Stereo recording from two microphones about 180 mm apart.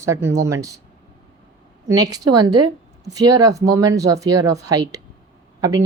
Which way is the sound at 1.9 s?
20° right (ahead or behind).